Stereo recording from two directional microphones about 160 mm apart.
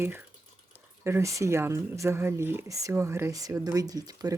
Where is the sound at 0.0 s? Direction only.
15° right (ahead or behind).